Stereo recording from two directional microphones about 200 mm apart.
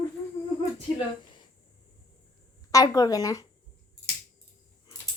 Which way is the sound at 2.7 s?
20° left (ahead or behind).